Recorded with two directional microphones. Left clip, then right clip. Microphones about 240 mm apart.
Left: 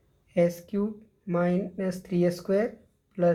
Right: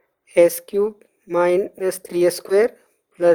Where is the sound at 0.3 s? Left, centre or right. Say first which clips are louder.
Right 11 dB; right.